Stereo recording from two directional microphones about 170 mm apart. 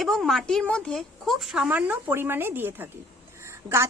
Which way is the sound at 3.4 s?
15° right (ahead or behind).